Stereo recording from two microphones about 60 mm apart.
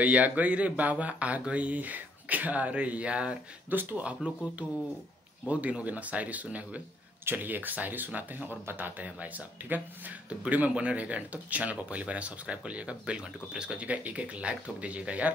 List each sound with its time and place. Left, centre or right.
0.0 s speech: right
5.5 s speech: right